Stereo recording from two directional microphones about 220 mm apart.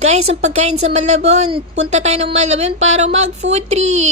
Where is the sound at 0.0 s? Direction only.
30° right (ahead or behind).